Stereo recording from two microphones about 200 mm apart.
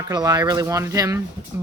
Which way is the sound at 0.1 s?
20° right (ahead or behind).